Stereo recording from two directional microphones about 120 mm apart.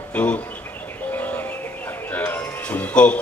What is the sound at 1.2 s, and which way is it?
Music, 15° left (ahead or behind).